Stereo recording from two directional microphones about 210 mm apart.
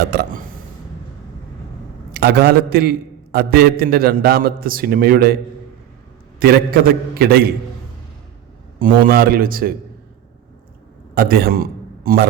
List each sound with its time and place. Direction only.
0.0 s a man's voice: 50° right (ahead or behind)
2.1 s a man's voice: 50° right (ahead or behind)
6.4 s a man's voice: 45° right (ahead or behind)
8.8 s a man's voice: 45° right (ahead or behind)
11.1 s a man's voice: 45° right (ahead or behind)